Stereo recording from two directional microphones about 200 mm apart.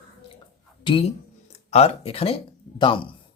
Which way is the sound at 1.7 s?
30° left (ahead or behind).